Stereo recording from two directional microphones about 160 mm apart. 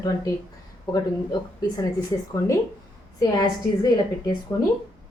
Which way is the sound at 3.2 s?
20° left (ahead or behind).